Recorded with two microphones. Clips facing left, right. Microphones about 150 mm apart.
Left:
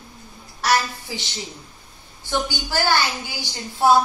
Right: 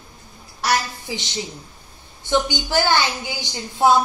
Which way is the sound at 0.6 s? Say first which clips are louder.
Left 1 dB; 15° right (ahead or behind).